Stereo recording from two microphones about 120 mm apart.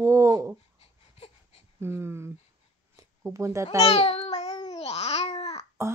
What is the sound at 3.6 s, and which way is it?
Babbling, 55° left (ahead or behind).